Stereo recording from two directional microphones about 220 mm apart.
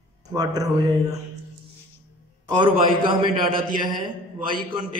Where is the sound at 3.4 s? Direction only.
40° right (ahead or behind).